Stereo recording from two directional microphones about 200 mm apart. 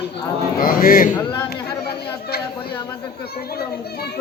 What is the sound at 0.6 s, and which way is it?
A child's voice, 45° left (ahead or behind).